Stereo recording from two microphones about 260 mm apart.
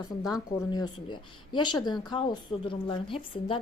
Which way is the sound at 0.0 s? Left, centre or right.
Centre.